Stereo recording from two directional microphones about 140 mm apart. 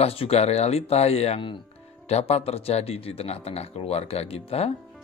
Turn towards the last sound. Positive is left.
turn(degrees=45)  # may be behind; listen again after turning